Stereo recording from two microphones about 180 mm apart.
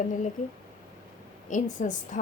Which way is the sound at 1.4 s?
45° left (ahead or behind).